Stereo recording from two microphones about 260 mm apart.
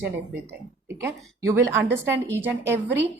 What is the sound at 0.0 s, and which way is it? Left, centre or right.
A woman's voice, centre.